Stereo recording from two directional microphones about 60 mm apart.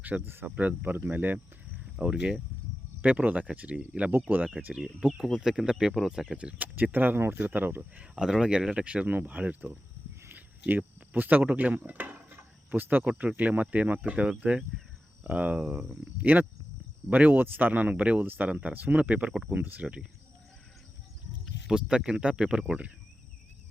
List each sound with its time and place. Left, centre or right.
0.0 s speech: right
2.0 s speech: centre
4.7 s speech: centre
6.3 s speech: right
8.1 s speech: centre; by 9.7 s right
10.2 s a sound: right
13.0 s speech: right
16.2 s speech: right
21.7 s speech: centre